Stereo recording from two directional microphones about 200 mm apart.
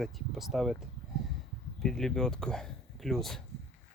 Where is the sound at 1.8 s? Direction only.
Centre (ahead or behind).